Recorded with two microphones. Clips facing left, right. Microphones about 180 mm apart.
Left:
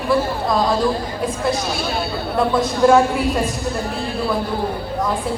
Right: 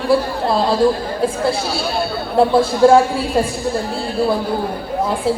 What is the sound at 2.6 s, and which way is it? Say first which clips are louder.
Speech: right 2 dB; 30° right (ahead or behind).